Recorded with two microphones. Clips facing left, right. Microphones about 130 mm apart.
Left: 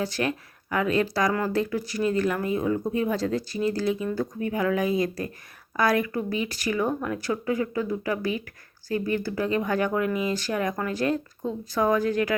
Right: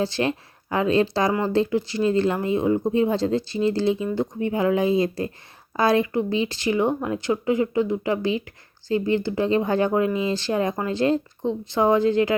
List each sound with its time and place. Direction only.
0.0 s speech: 25° right (ahead or behind)